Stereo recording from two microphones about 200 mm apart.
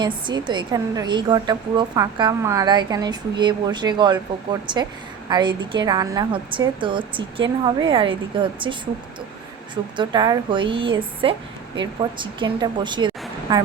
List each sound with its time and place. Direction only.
0.0 s a woman's voice: 20° right (ahead or behind)
10.0 s a woman's voice: 20° right (ahead or behind)